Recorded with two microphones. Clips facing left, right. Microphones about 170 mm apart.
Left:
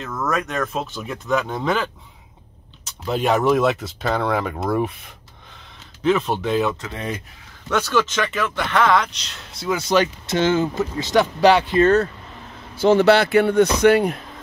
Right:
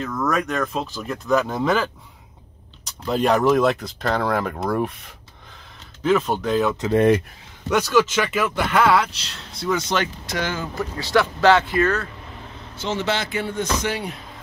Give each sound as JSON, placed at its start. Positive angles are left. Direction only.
{"t": 0.0, "sound": "speech", "side_deg": 0}
{"t": 7.7, "sound": "speech", "side_deg": -10}
{"t": 10.2, "sound": "speech", "side_deg": 25}
{"t": 12.8, "sound": "speech", "side_deg": 60}